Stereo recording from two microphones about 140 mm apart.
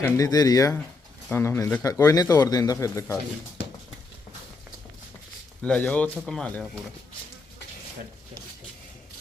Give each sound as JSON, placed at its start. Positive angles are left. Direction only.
{"t": 0.2, "sound": "a man's voice", "side_deg": 25}
{"t": 5.6, "sound": "speech", "side_deg": 10}